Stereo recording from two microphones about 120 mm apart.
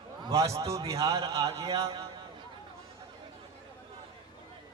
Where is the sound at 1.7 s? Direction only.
55° right (ahead or behind).